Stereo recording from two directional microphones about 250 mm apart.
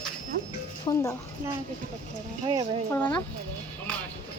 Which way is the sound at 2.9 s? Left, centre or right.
Centre.